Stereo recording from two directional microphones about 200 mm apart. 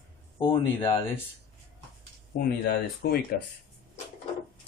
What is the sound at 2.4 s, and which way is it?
Speech, 50° left (ahead or behind).